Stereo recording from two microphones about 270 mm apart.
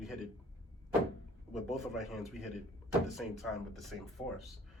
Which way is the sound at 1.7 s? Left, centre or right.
Centre.